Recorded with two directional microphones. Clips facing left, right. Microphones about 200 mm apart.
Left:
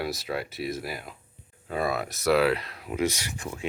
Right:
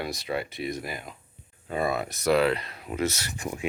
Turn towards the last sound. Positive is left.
turn(degrees=-15)  # may be behind; listen again after turning